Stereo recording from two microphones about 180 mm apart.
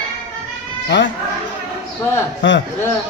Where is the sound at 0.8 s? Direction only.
75° left (ahead or behind).